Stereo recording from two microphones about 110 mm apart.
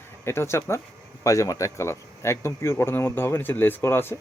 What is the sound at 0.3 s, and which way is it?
Speech, 25° left (ahead or behind).